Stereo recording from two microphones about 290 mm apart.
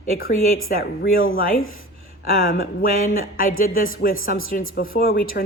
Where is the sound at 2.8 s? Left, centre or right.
Left.